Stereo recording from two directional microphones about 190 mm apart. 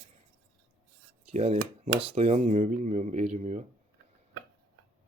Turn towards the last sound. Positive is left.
turn(degrees=-35)  # may be behind; listen again after turning